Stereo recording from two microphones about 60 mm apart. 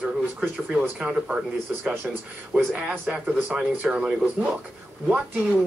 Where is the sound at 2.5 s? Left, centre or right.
Right.